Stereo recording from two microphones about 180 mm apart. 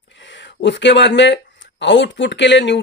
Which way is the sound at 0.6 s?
85° left.